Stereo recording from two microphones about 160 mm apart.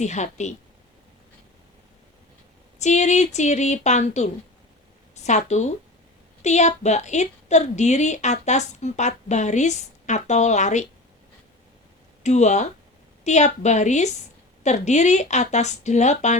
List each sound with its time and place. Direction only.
0.0 s a woman's voice: 45° left (ahead or behind)
2.7 s a woman's voice: 45° left (ahead or behind)
12.2 s a woman's voice: 45° left (ahead or behind)